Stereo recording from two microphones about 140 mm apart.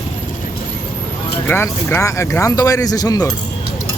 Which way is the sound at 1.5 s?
15° left (ahead or behind).